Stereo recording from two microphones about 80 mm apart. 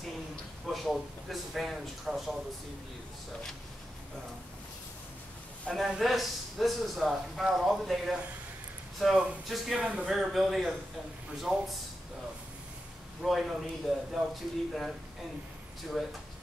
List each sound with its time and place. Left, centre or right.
0.7 s a man's voice: centre
5.8 s a man's voice: centre
9.8 s speech: centre
10.0 s a man's voice: centre
13.2 s a man's voice: centre
16.0 s a man's voice: centre